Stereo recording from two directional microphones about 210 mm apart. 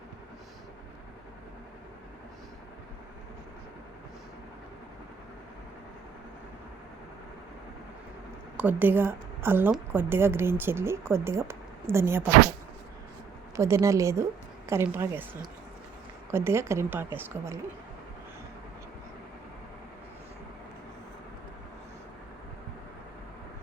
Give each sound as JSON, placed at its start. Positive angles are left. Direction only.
{"t": 8.5, "sound": "a woman's voice", "side_deg": -10}
{"t": 13.6, "sound": "a woman's voice", "side_deg": -15}